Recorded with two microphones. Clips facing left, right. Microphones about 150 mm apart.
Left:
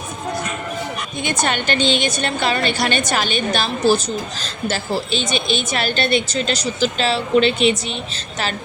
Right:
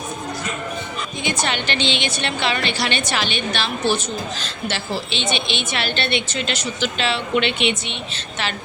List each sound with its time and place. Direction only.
1.2 s a woman's voice: 50° left (ahead or behind)